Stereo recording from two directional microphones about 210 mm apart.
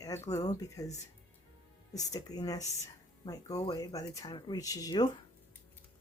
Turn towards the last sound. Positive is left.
turn(degrees=20)  # may be behind; listen again after turning